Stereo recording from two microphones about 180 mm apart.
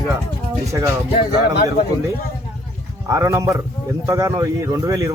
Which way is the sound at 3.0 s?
20° right (ahead or behind).